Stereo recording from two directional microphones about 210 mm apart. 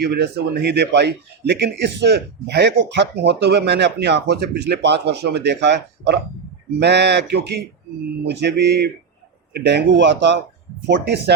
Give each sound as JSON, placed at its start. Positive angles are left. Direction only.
{"t": 0.0, "sound": "speech", "side_deg": -50}
{"t": 8.6, "sound": "speech", "side_deg": -50}